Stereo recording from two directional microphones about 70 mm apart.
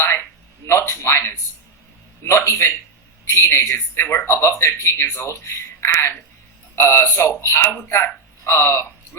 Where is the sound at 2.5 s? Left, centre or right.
Left.